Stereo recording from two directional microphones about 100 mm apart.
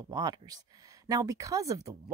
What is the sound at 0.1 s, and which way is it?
Speech, 40° right (ahead or behind).